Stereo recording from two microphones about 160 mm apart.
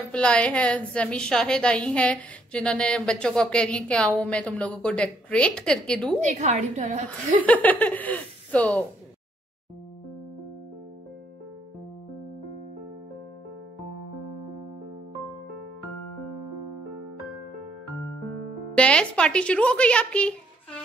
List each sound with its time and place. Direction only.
0.1 s a woman's voice: 5° left (ahead or behind)
6.2 s a woman's voice: 45° right (ahead or behind)
7.4 s a woman's voice: 10° left (ahead or behind)
18.8 s a woman's voice: 5° left (ahead or behind)